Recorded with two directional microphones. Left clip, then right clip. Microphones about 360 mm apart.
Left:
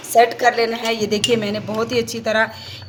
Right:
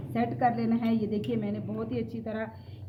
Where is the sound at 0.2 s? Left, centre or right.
Centre.